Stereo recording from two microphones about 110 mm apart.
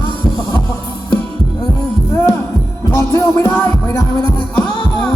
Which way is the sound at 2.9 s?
20° left (ahead or behind).